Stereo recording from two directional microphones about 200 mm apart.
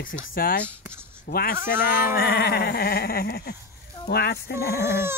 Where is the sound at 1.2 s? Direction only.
50° left (ahead or behind).